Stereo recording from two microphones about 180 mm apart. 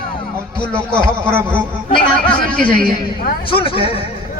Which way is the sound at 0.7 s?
5° left (ahead or behind).